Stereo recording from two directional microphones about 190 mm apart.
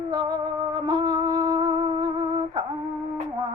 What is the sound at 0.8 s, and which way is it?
Music, 20° right (ahead or behind).